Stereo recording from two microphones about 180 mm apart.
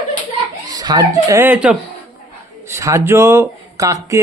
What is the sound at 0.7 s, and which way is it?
Speech, 20° right (ahead or behind).